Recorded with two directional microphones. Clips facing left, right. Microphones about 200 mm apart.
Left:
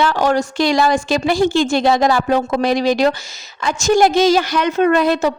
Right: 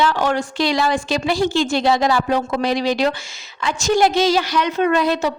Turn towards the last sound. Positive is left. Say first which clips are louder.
# left 3 dB
turn(degrees=50)  # may be behind; listen again after turning